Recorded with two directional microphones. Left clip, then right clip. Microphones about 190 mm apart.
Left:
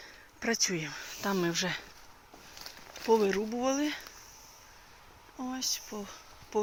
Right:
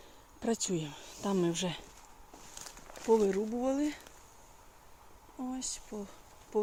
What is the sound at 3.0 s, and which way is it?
Speech, centre (ahead or behind).